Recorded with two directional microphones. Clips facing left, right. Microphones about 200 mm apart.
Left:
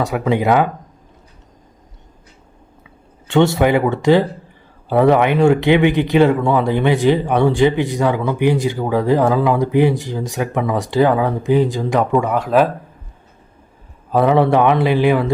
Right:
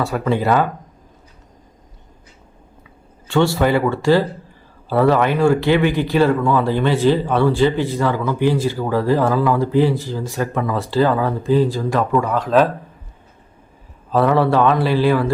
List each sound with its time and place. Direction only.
0.0 s speech: 15° left (ahead or behind)
3.2 s speech: 20° left (ahead or behind)
14.1 s speech: 15° left (ahead or behind)